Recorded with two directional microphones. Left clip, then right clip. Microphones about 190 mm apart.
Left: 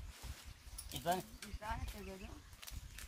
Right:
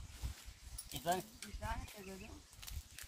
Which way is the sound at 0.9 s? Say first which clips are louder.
Even; 25° left (ahead or behind).